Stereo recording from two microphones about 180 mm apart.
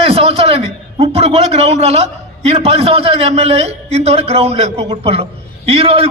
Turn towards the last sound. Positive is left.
turn(degrees=-30)  # may be behind; listen again after turning